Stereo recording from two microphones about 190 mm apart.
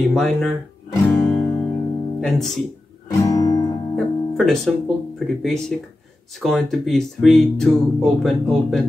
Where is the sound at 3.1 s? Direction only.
20° left (ahead or behind).